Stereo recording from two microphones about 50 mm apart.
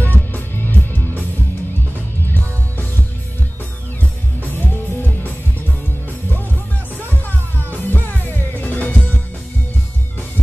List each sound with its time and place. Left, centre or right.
0.0 s music: left
4.5 s music: left
7.1 s music: left